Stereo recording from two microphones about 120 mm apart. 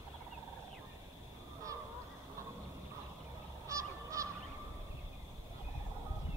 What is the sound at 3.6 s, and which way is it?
Goose, 25° right (ahead or behind).